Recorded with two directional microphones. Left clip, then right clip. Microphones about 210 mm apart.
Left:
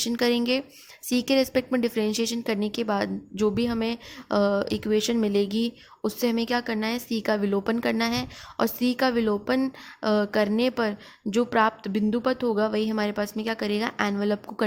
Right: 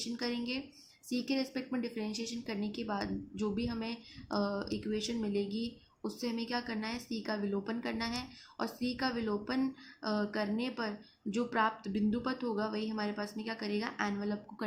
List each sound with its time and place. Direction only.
0.0 s a woman's voice: 45° left (ahead or behind)